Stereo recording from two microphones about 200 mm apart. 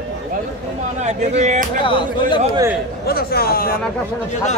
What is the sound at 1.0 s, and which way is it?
Speech, 35° right (ahead or behind).